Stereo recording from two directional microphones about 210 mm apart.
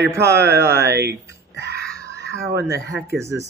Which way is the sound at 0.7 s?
50° right (ahead or behind).